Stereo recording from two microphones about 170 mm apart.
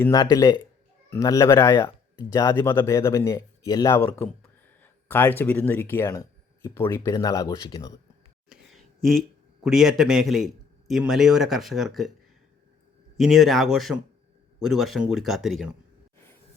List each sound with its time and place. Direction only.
0.0 s speech: 20° left (ahead or behind)
4.8 s a sound: 10° left (ahead or behind)
5.4 s speech: 10° left (ahead or behind)
8.4 s a sound: centre (ahead or behind)
9.6 s a man's voice: centre (ahead or behind)
13.1 s a man's voice: centre (ahead or behind)